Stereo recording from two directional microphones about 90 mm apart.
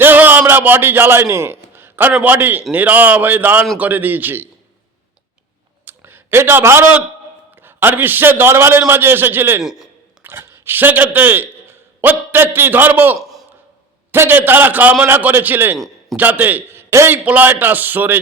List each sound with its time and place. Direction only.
0.0 s a sound: 20° right (ahead or behind)
2.2 s a man's voice: 20° right (ahead or behind)
5.8 s a sound: 25° right (ahead or behind)
7.5 s a man's voice: 25° right (ahead or behind)
9.6 s a man's voice: 5° right (ahead or behind)
10.2 s a man's voice: 30° right (ahead or behind)